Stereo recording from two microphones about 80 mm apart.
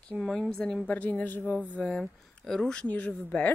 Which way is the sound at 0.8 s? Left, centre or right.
Centre.